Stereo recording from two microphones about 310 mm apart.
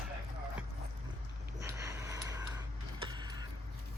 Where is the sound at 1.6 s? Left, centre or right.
Centre.